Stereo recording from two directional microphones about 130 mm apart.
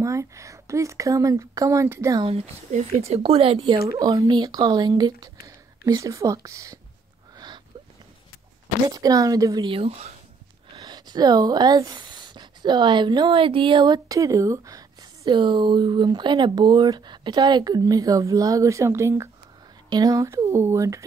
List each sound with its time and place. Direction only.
0.0 s speech: 25° right (ahead or behind)
2.7 s speech: 55° right (ahead or behind)
3.2 s speech: 45° right (ahead or behind)
3.7 s speech: 25° right (ahead or behind)
7.3 s a sound: 35° right (ahead or behind)
8.8 s speech: 25° right (ahead or behind)
9.7 s speech: 45° right (ahead or behind)
10.8 s speech: 30° right (ahead or behind)